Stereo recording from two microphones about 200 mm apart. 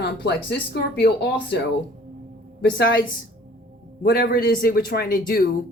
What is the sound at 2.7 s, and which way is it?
A woman's voice, 50° left (ahead or behind).